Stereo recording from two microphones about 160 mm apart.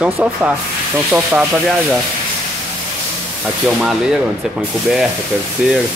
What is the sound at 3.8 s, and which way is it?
Speech, 5° right (ahead or behind).